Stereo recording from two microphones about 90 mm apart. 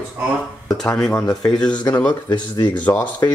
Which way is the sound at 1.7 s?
50° left (ahead or behind).